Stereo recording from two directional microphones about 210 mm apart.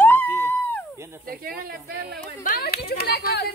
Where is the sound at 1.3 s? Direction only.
45° right (ahead or behind).